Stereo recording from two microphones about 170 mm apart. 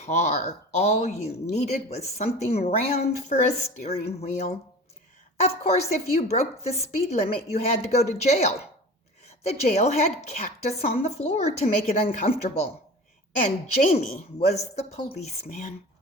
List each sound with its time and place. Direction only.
0.0 s speech: 40° left (ahead or behind)